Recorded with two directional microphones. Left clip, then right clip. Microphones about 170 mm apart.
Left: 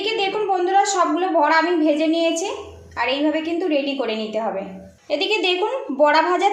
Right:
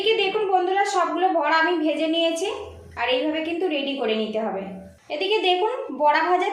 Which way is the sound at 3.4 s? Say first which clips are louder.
Left 3 dB; 25° left (ahead or behind).